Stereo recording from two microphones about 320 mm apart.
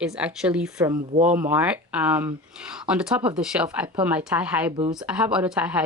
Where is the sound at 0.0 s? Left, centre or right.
Centre.